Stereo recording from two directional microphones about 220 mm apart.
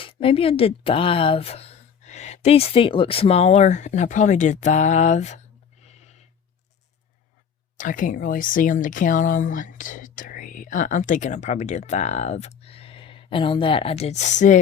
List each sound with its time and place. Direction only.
0.0 s speech: 25° left (ahead or behind)
5.8 s a sound: 30° left (ahead or behind)
7.8 s speech: 35° left (ahead or behind)